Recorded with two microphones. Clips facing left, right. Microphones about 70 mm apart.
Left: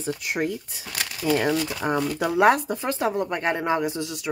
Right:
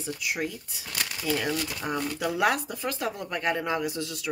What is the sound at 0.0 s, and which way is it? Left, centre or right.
Speech, left.